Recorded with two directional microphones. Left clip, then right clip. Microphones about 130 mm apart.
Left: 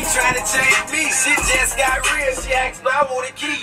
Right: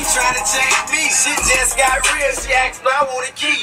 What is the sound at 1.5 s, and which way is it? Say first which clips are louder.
Music: right 2 dB; 35° right (ahead or behind).